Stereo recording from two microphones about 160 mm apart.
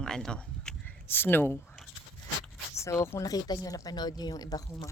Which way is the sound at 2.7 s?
20° left (ahead or behind).